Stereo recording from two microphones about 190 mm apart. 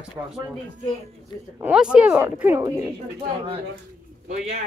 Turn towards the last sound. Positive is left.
turn(degrees=-40)  # may be behind; listen again after turning